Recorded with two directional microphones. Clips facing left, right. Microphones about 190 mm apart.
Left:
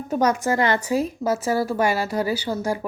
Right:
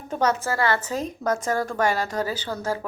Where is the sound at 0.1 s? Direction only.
10° left (ahead or behind).